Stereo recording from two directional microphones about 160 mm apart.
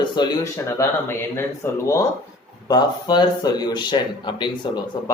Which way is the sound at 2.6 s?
25° left (ahead or behind).